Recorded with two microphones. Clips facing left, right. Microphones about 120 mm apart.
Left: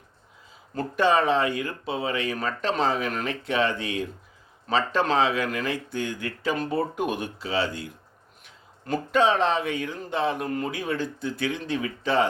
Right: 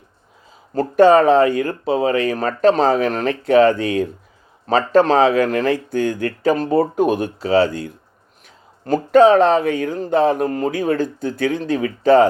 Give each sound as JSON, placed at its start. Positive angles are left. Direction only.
{"t": 0.7, "sound": "speech", "side_deg": -40}